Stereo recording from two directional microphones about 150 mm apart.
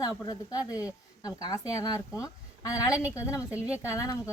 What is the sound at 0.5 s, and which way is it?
Speech, 10° right (ahead or behind).